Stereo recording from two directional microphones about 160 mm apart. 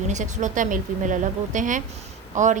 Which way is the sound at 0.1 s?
50° right (ahead or behind).